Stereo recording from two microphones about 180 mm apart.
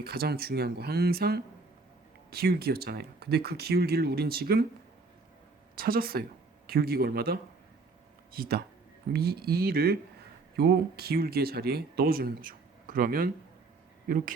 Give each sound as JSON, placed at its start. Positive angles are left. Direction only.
{"t": 0.0, "sound": "speech", "side_deg": -60}
{"t": 5.7, "sound": "speech", "side_deg": -55}